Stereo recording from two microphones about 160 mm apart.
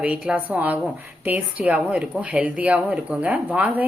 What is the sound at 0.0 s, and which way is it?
A woman's voice, 5° right (ahead or behind).